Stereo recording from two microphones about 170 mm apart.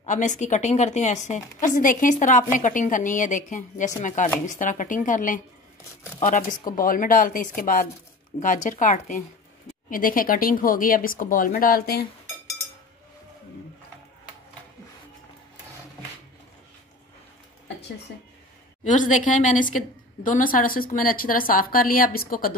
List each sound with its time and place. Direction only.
0.0 s a woman's voice: 45° left (ahead or behind); by 12.1 s 65° left (ahead or behind)
18.9 s a woman's voice: 45° left (ahead or behind)